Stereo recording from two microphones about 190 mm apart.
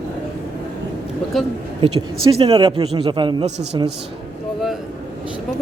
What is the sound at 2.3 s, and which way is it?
A man's voice, 25° right (ahead or behind).